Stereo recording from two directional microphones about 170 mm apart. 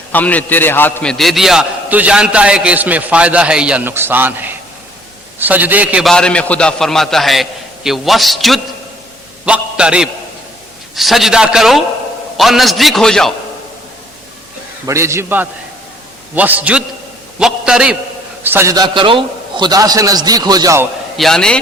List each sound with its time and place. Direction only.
0.1 s a man's voice: 10° left (ahead or behind)
14.8 s a man's voice: 15° right (ahead or behind)
21.2 s a man's voice: 5° left (ahead or behind)